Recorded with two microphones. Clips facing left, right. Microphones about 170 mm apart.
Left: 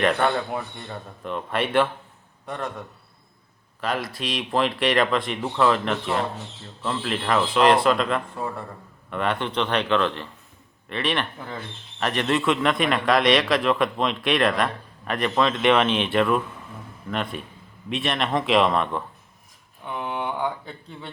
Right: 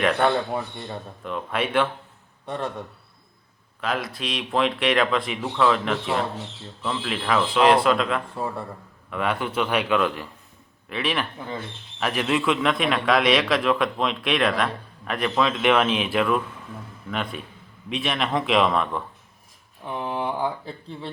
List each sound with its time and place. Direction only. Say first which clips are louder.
0.0 s a man's voice: right 1 dB; centre (ahead or behind)
2.5 s a man's voice: right 2 dB; 30° right (ahead or behind)
3.8 s a man's voice: even; centre (ahead or behind)
19.8 s a sound: right 1 dB; 30° right (ahead or behind)
20.4 s speech: right 1 dB; 30° right (ahead or behind)